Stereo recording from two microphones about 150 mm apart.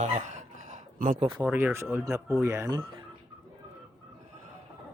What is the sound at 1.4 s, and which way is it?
A man's voice, 10° right (ahead or behind).